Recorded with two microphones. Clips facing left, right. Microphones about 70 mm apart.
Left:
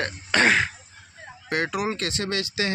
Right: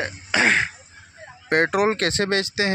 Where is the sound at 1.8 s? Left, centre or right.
Right.